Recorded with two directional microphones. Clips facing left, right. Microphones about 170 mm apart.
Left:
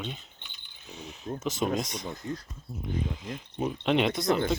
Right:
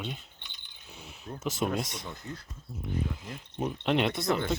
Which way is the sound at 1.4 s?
5° right (ahead or behind).